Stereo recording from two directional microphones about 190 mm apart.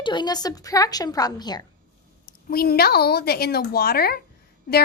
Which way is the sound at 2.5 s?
55° left (ahead or behind).